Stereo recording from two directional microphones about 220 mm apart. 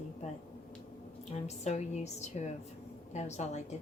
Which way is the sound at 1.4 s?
30° left (ahead or behind).